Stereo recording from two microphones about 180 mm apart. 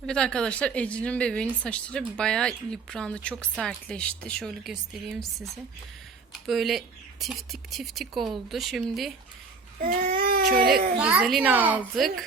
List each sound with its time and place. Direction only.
0.0 s a woman's voice: 5° left (ahead or behind)
6.5 s a woman's voice: centre (ahead or behind)
9.8 s speech: 50° right (ahead or behind)
11.0 s a woman's voice: 5° right (ahead or behind)